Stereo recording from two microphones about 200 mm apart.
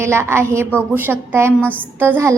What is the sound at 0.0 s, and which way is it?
A woman's voice, 15° right (ahead or behind).